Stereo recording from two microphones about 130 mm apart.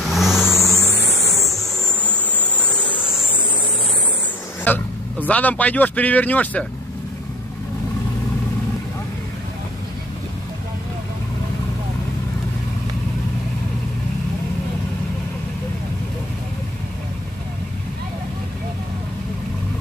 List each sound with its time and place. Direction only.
0.0 s vehicle: centre (ahead or behind)
0.5 s music: 20° left (ahead or behind)
4.6 s speech: 15° left (ahead or behind)